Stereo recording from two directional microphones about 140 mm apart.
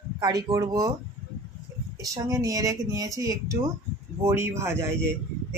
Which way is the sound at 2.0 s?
25° right (ahead or behind).